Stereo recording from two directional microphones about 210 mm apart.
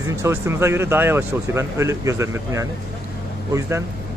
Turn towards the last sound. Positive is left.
turn(degrees=-15)  # may be behind; listen again after turning